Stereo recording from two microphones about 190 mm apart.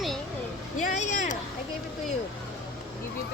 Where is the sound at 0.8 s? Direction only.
40° left (ahead or behind).